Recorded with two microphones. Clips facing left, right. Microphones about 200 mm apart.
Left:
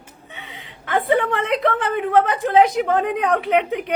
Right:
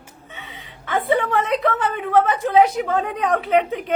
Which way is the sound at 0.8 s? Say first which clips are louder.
Left 1 dB; 15° left (ahead or behind).